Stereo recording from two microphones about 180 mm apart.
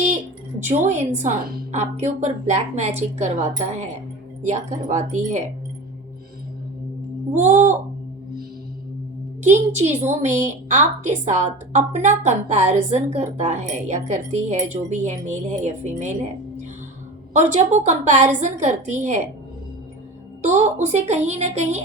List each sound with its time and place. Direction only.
0.7 s a woman's voice: 40° right (ahead or behind)
7.3 s a sound: 40° right (ahead or behind)
9.4 s a woman's voice: 40° right (ahead or behind)
17.3 s a woman's voice: 40° right (ahead or behind)
20.4 s a woman's voice: 40° right (ahead or behind)